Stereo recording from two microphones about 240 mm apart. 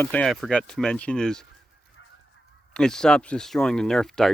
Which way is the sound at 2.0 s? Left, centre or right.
Left.